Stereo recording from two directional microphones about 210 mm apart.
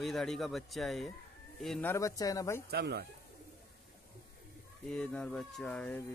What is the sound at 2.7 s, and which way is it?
Speech, 50° right (ahead or behind).